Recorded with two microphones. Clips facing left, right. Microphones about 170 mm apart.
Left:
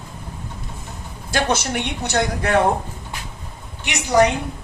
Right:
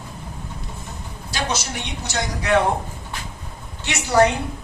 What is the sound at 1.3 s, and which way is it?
Speech, 55° left (ahead or behind).